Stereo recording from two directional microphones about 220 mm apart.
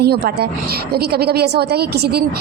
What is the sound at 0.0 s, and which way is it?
A woman's voice, 45° right (ahead or behind).